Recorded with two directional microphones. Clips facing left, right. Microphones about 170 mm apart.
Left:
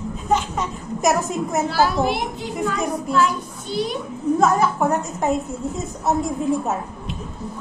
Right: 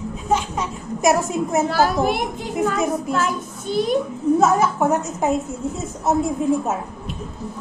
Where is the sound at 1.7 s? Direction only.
50° right (ahead or behind).